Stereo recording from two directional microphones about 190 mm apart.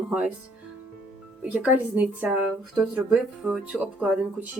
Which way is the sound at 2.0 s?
5° right (ahead or behind).